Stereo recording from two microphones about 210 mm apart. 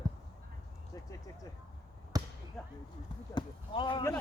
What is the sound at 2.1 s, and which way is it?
Basketball bounce, 15° right (ahead or behind).